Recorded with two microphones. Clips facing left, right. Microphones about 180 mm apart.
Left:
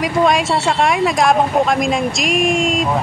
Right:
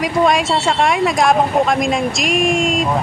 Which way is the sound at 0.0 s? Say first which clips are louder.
Even; centre (ahead or behind).